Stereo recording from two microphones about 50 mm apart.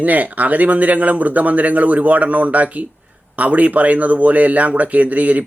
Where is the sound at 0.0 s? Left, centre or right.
Right.